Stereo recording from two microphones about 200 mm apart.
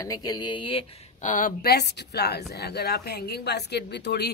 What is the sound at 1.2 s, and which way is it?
A woman's voice, 40° left (ahead or behind).